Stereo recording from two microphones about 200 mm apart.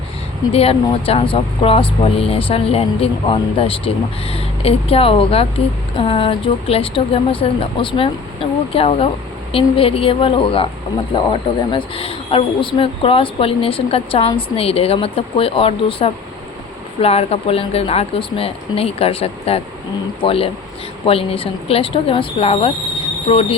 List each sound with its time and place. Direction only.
0.5 s speech: 30° left (ahead or behind)